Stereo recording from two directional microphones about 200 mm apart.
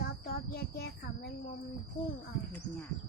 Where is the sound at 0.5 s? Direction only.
50° left (ahead or behind).